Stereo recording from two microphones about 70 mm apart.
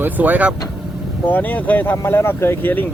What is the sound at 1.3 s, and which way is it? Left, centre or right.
Speech, left.